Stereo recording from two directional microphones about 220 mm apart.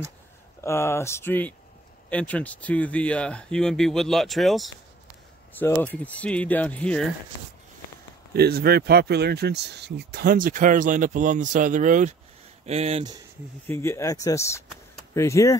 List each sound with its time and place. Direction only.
0.6 s speech: 10° left (ahead or behind)
8.3 s speech: 45° right (ahead or behind); by 13.1 s 30° right (ahead or behind)
13.7 s speech: 10° left (ahead or behind)